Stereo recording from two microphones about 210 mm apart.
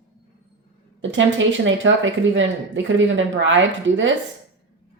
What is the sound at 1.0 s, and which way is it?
A woman's voice, 65° right (ahead or behind).